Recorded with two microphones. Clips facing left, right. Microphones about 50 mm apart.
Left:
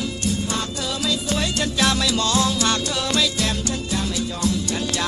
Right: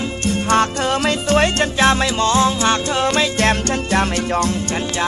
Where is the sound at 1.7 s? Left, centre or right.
Right.